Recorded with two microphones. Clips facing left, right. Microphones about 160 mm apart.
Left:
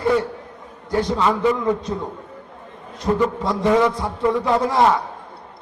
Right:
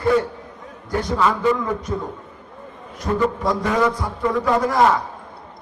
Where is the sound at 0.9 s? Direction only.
20° left (ahead or behind).